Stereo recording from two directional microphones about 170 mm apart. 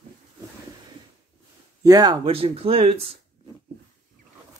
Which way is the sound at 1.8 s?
20° right (ahead or behind).